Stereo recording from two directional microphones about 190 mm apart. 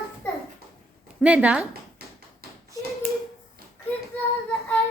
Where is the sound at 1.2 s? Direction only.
5° right (ahead or behind).